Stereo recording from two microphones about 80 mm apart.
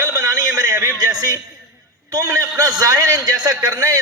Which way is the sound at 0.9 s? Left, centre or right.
Right.